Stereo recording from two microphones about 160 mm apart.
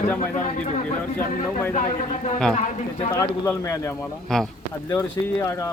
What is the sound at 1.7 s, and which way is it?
Speech, 50° left (ahead or behind).